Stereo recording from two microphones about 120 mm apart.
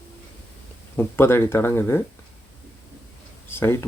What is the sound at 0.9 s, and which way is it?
Speech, 20° left (ahead or behind).